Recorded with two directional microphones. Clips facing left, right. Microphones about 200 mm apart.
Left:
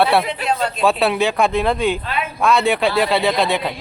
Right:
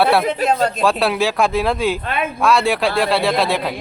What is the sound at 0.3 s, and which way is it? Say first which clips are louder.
Speech: right 4 dB; 40° right (ahead or behind).